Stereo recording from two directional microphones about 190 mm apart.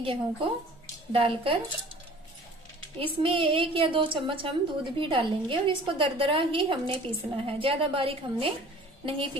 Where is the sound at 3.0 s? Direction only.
30° right (ahead or behind).